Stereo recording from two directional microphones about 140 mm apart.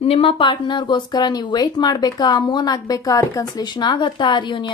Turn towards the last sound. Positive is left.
turn(degrees=35)  # may be behind; listen again after turning